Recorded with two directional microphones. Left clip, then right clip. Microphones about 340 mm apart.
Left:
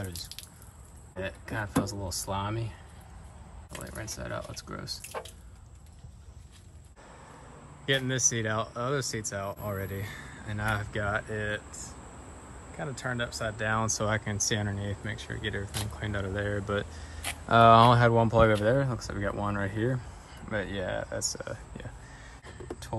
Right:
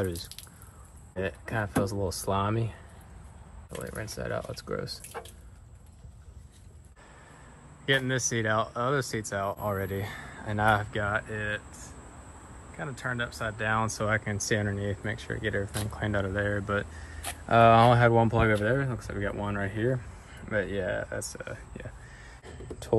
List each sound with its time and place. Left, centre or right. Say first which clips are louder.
0.0 s speech: right 7 dB; centre
3.7 s speech: right 3 dB; centre
7.8 s speech: right 1 dB; centre
12.7 s speech: right 1 dB; centre